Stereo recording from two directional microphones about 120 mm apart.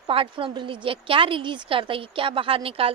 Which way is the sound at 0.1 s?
50° right (ahead or behind).